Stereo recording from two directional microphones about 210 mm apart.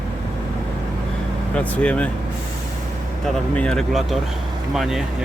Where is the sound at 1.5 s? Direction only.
5° left (ahead or behind).